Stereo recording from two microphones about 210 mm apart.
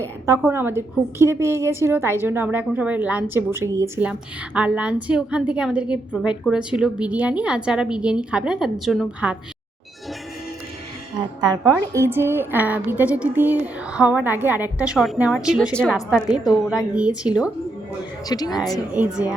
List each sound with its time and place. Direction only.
0.3 s a woman's voice: 10° right (ahead or behind)
11.4 s a woman's voice: 20° right (ahead or behind)
18.3 s a woman's voice: 20° left (ahead or behind)
18.9 s a woman's voice: 5° right (ahead or behind)